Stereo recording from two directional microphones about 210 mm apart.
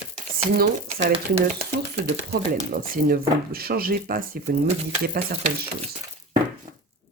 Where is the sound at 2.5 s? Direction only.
45° right (ahead or behind).